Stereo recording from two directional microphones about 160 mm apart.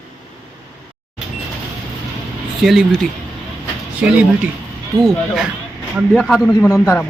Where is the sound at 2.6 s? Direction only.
Centre (ahead or behind).